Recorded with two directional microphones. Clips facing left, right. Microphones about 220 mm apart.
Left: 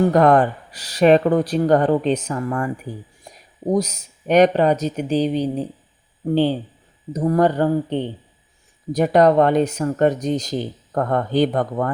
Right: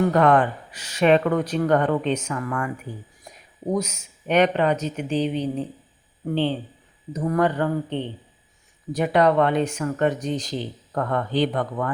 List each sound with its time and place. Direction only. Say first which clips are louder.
0.0 s speech: left 4 dB; 40° left (ahead or behind)
3.3 s a sound: left 2 dB; 30° left (ahead or behind)
3.7 s speech: left 5 dB; 35° left (ahead or behind)